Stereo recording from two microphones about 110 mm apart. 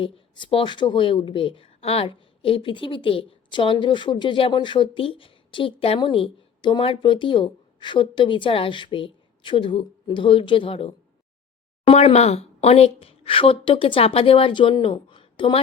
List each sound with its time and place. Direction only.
0.0 s speech: 50° left (ahead or behind)